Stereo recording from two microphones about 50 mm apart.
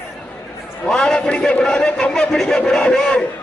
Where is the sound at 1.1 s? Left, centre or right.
Centre.